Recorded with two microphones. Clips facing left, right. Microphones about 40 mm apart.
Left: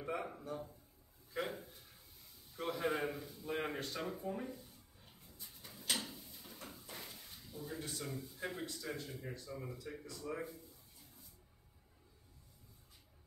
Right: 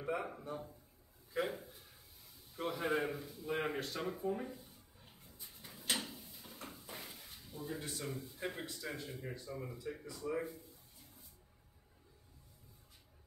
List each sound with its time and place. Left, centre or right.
0.0 s a man's voice: centre
1.3 s speech: centre
4.5 s a sound: centre
6.1 s drawer open or close: centre
7.9 s a man's voice: centre